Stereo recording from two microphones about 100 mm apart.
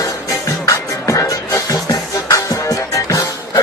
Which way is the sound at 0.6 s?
30° left (ahead or behind).